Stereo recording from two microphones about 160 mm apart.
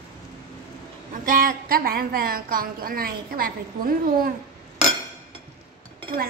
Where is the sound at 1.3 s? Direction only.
60° right (ahead or behind).